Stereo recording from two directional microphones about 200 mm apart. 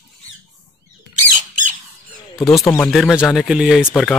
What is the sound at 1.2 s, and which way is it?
Squawk, 40° right (ahead or behind).